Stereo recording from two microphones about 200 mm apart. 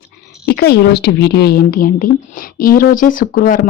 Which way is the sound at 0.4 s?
55° left (ahead or behind).